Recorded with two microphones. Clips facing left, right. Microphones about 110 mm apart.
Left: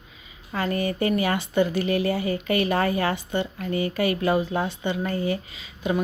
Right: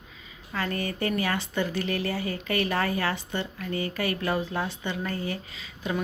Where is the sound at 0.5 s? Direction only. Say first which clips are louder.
Left 5 dB; 20° left (ahead or behind).